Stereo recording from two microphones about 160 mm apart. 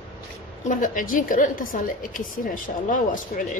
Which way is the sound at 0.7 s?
55° left (ahead or behind).